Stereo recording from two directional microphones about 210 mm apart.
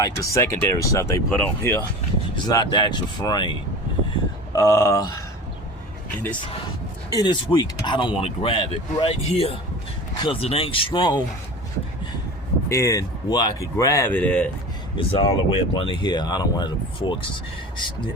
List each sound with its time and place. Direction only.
0.0 s speech: 15° left (ahead or behind)
4.5 s speech: 15° left (ahead or behind)
7.1 s speech: 20° left (ahead or behind)
12.6 s speech: 15° left (ahead or behind)
14.9 s speech: 25° left (ahead or behind)